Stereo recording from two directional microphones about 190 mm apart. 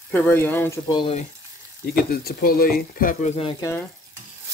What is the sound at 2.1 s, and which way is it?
Speech, 50° left (ahead or behind).